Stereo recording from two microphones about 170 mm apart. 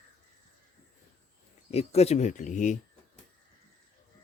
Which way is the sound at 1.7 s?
35° left (ahead or behind).